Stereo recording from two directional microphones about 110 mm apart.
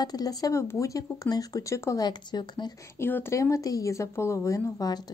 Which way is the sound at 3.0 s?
20° left (ahead or behind).